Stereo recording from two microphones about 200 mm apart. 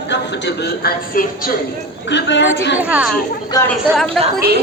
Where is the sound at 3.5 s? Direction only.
20° left (ahead or behind).